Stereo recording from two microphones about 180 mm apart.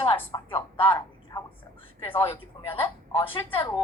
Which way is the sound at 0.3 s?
25° left (ahead or behind).